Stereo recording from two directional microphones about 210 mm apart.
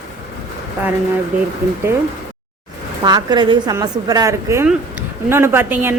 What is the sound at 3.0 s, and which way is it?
A woman's voice, 20° right (ahead or behind).